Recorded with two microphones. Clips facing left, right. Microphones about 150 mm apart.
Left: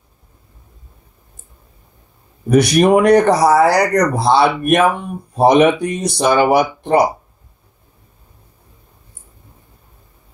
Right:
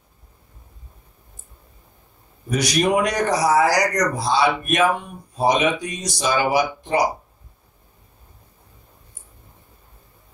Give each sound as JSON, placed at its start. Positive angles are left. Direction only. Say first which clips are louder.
{"t": 2.5, "sound": "speech", "louder": "left 8 dB", "side_deg": 60}